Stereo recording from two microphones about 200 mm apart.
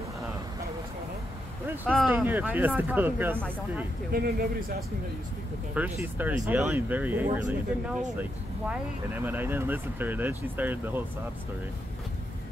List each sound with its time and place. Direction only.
1.9 s speech: centre (ahead or behind)
4.1 s speech: 50° right (ahead or behind)
5.8 s speech: 10° right (ahead or behind)
9.2 s speech: 10° right (ahead or behind)